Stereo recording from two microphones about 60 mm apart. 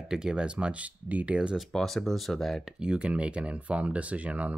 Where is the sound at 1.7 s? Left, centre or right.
Centre.